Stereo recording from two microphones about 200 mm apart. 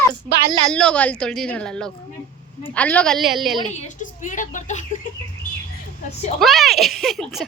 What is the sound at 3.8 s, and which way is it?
Speech, 40° left (ahead or behind).